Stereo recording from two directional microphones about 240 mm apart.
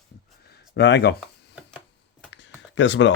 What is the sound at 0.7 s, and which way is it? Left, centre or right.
Speech, left.